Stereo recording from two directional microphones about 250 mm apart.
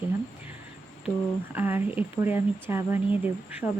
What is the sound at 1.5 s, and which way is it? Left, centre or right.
Speech, centre.